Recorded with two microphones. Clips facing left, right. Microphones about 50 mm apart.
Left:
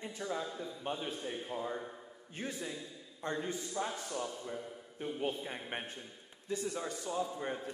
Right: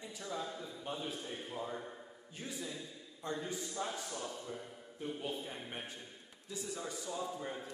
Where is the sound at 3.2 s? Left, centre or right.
Left.